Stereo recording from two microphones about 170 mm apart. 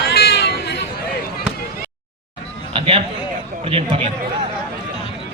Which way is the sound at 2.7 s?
35° right (ahead or behind).